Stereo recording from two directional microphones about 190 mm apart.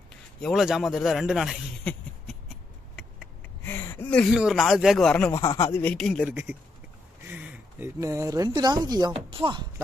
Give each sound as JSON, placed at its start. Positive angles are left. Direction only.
{"t": 0.4, "sound": "a man's voice", "side_deg": 0}
{"t": 3.6, "sound": "a sound", "side_deg": 10}
{"t": 4.4, "sound": "speech", "side_deg": 0}